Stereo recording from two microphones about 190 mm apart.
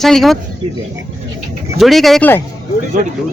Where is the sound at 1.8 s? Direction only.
Centre (ahead or behind).